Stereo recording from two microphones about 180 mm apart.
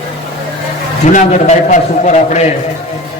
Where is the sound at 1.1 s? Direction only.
45° left (ahead or behind).